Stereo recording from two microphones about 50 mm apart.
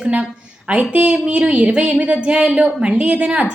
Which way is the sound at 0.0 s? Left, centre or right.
Right.